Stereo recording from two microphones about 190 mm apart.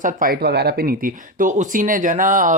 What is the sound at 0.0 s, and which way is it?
Speech, 50° right (ahead or behind).